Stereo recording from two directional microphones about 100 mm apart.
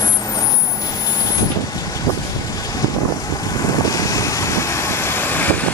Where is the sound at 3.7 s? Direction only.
35° left (ahead or behind); by 5.5 s 20° left (ahead or behind).